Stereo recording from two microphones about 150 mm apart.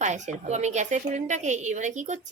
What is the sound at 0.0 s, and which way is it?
A woman's voice, 50° right (ahead or behind).